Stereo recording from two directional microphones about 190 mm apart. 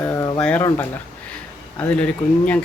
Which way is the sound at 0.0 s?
15° left (ahead or behind).